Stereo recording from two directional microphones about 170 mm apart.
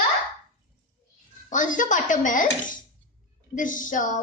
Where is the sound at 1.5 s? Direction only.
50° left (ahead or behind).